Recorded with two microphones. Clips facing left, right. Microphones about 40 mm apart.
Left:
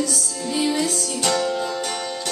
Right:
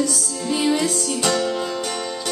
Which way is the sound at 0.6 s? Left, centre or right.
Centre.